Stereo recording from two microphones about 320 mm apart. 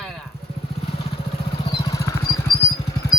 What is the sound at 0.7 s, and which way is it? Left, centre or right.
Motorcycle, centre.